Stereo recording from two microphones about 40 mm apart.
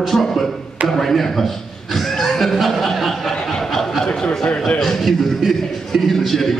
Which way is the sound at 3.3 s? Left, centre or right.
Centre.